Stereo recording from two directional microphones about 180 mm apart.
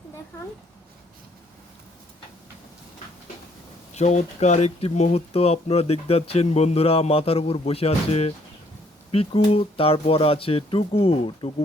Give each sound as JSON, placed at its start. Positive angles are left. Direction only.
{"t": 3.9, "sound": "speech", "side_deg": 40}